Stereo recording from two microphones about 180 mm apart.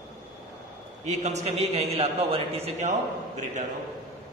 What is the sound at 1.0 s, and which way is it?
A man's voice, 40° right (ahead or behind).